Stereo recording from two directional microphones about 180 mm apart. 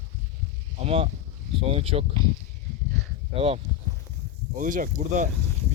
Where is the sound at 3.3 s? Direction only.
30° right (ahead or behind).